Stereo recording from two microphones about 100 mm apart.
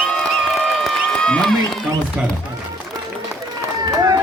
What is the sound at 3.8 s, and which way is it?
Run, 40° right (ahead or behind).